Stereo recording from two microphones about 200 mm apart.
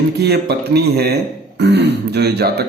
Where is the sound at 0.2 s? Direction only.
55° right (ahead or behind).